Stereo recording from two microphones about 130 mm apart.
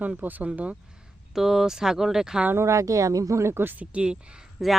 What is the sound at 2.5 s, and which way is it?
Speech, 20° right (ahead or behind).